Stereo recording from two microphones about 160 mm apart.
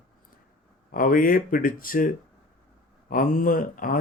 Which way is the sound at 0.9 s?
60° left (ahead or behind).